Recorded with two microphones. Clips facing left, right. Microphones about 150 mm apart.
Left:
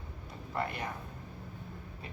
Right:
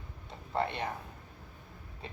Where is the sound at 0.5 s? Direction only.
30° right (ahead or behind).